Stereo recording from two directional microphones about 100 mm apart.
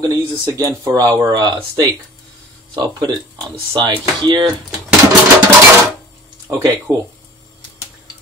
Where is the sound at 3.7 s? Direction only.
55° right (ahead or behind).